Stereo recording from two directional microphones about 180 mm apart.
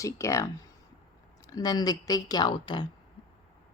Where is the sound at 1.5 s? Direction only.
20° left (ahead or behind).